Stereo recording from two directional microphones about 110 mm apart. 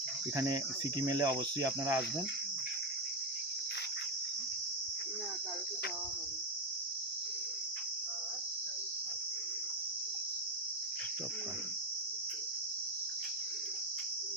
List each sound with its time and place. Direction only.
0.3 s cricket: 35° right (ahead or behind)